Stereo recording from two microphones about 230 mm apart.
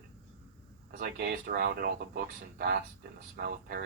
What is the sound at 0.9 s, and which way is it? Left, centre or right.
Speech, right.